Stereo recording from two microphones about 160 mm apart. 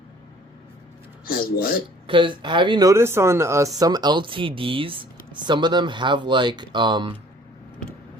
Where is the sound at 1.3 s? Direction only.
70° left (ahead or behind).